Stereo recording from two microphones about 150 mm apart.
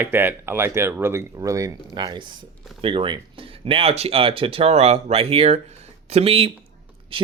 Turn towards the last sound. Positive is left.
turn(degrees=-35)  # may be behind; listen again after turning